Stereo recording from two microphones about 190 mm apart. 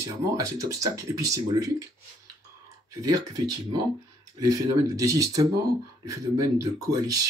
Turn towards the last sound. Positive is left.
turn(degrees=-20)  # may be behind; listen again after turning